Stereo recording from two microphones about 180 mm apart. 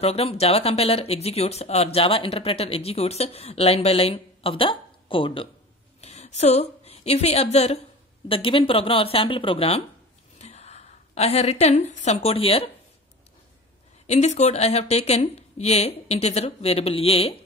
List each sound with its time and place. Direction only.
0.0 s a woman's voice: 35° left (ahead or behind)
14.0 s speech: 40° left (ahead or behind)